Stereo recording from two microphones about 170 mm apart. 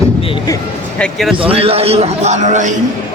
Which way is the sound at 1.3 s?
35° right (ahead or behind).